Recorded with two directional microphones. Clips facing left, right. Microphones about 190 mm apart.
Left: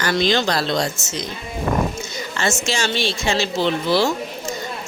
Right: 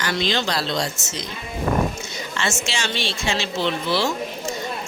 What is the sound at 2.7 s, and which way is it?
Speech, 40° left (ahead or behind).